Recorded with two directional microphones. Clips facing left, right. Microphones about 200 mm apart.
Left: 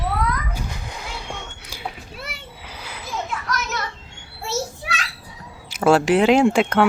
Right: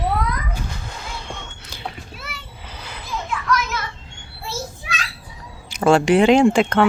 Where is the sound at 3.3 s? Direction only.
40° left (ahead or behind).